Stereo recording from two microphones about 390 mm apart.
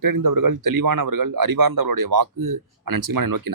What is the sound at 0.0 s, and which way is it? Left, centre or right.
Speech, right.